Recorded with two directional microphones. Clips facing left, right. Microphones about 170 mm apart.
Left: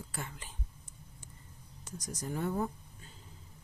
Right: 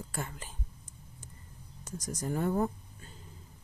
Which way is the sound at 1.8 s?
45° right (ahead or behind).